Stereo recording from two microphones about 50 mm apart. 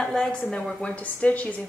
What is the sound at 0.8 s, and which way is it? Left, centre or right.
Speech, left.